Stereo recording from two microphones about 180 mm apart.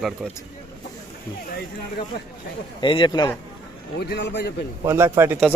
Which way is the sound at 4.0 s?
70° left (ahead or behind).